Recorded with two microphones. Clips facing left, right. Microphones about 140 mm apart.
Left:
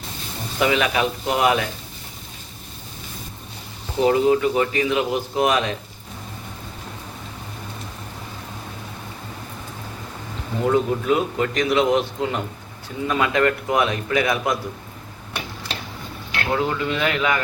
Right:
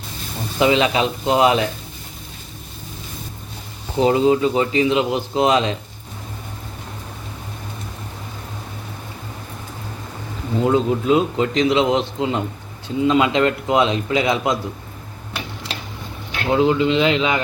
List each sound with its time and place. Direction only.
0.6 s a man's voice: 25° right (ahead or behind)
4.0 s a man's voice: 25° right (ahead or behind)
10.6 s a man's voice: 20° right (ahead or behind)
16.5 s a man's voice: 20° right (ahead or behind)